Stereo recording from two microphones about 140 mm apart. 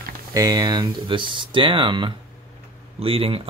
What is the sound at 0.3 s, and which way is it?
Speech, 30° right (ahead or behind).